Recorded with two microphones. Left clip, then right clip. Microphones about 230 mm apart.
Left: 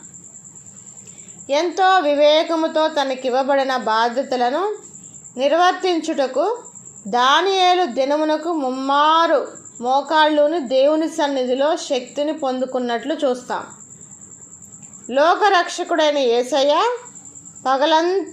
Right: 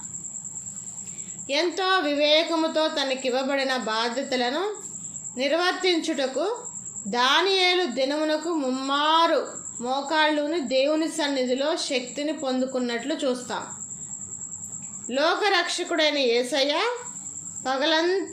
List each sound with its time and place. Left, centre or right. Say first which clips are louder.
1.5 s a woman's voice: left 8 dB; centre
15.1 s a woman's voice: left 8 dB; centre